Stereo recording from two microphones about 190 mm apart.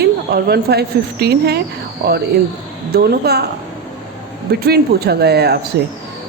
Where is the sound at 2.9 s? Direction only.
55° right (ahead or behind).